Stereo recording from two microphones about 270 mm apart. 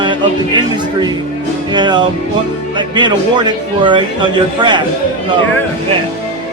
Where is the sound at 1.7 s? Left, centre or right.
Centre.